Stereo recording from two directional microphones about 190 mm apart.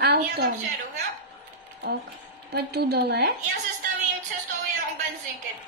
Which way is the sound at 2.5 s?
55° right (ahead or behind).